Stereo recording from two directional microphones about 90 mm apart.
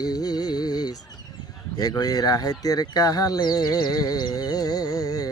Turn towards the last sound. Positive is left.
turn(degrees=45)  # may be behind; listen again after turning